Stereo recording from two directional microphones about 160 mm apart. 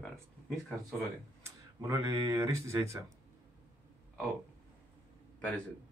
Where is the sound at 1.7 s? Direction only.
20° right (ahead or behind).